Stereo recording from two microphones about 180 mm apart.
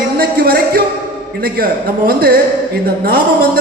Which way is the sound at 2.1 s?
60° right (ahead or behind).